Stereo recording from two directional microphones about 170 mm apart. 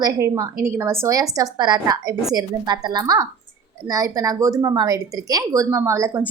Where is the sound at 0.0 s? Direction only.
20° right (ahead or behind).